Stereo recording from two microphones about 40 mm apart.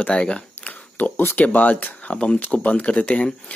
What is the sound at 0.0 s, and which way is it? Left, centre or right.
Speech, left.